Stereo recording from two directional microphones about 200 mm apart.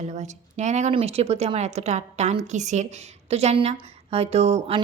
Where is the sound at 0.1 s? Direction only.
35° right (ahead or behind).